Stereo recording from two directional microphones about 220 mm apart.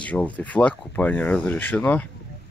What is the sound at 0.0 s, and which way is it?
Speech, 5° left (ahead or behind).